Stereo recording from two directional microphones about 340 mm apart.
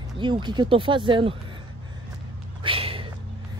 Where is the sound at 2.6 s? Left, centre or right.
Centre.